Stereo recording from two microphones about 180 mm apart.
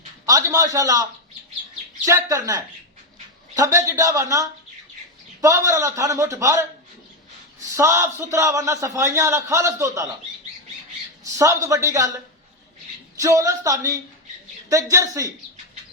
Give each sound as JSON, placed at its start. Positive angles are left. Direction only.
{"t": 0.3, "sound": "a man's voice", "side_deg": -20}
{"t": 2.0, "sound": "a man's voice", "side_deg": -20}
{"t": 7.8, "sound": "a man's voice", "side_deg": -15}
{"t": 11.2, "sound": "a man's voice", "side_deg": -20}
{"t": 13.1, "sound": "a man's voice", "side_deg": -20}